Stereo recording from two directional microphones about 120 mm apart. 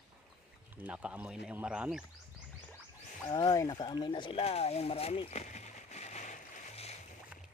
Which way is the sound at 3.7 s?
40° left (ahead or behind).